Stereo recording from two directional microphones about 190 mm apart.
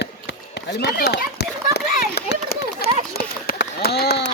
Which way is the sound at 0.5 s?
60° left (ahead or behind).